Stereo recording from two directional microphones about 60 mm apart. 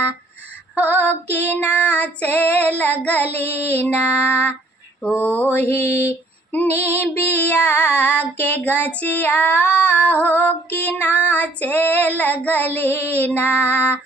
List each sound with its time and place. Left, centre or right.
0.8 s female singing: left